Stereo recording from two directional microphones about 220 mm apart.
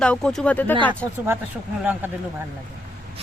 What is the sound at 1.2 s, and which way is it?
Speech, 10° right (ahead or behind).